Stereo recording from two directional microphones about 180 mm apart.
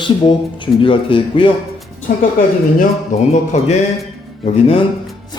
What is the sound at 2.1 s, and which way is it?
Speech, 50° left (ahead or behind).